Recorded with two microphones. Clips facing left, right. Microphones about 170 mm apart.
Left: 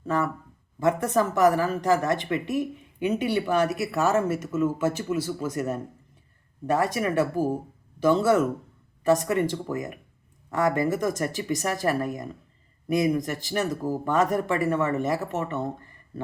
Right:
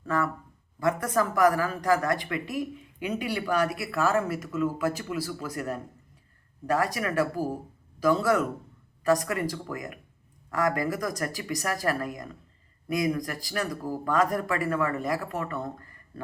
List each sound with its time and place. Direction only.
0.0 s a woman's voice: 20° left (ahead or behind)